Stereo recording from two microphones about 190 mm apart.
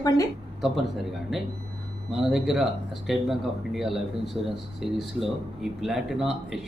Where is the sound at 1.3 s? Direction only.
Centre (ahead or behind).